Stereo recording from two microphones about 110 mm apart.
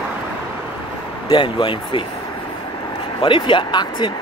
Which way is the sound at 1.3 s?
50° left (ahead or behind).